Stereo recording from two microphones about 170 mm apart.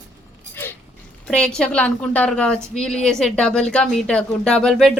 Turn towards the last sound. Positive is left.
turn(degrees=0)  # may be behind; listen again after turning